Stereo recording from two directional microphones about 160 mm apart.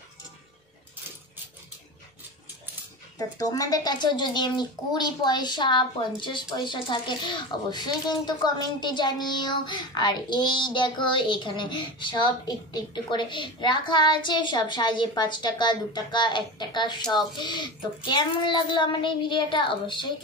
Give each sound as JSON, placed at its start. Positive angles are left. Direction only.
{"t": 3.2, "sound": "speech", "side_deg": 20}